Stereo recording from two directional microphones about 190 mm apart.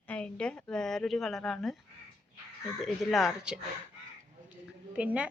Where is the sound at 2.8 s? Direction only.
Centre (ahead or behind).